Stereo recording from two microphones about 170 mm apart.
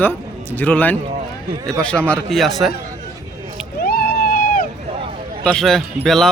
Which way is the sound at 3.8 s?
65° left (ahead or behind).